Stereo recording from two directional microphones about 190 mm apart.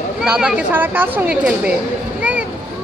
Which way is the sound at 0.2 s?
5° right (ahead or behind).